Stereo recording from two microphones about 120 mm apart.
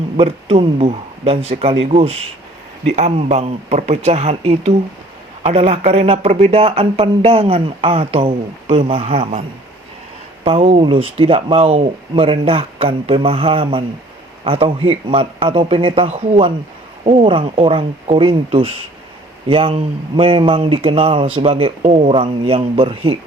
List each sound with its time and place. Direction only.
0.2 s speech: 50° right (ahead or behind)
10.4 s speech: 55° right (ahead or behind)
17.1 s speech: 50° right (ahead or behind)